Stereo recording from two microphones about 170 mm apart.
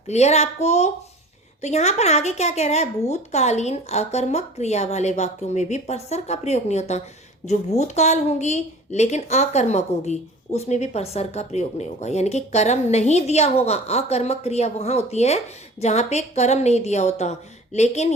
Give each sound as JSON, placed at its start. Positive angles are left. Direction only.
{"t": 0.1, "sound": "a woman's voice", "side_deg": 40}